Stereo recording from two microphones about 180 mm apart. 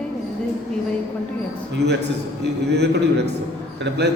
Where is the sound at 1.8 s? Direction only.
65° right (ahead or behind).